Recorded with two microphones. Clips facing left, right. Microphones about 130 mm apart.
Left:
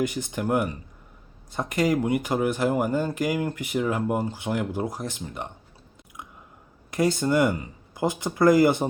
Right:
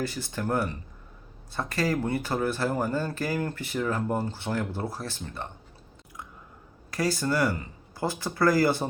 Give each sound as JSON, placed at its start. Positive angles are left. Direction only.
{"t": 0.0, "sound": "speech", "side_deg": 15}
{"t": 6.9, "sound": "speech", "side_deg": 20}